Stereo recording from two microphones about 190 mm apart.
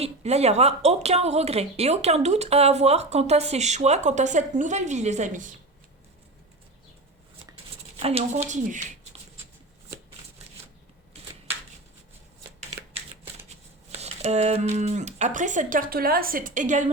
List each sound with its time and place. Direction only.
0.0 s speech: 35° right (ahead or behind)
7.9 s speech: 30° right (ahead or behind)
14.0 s speech: 35° right (ahead or behind)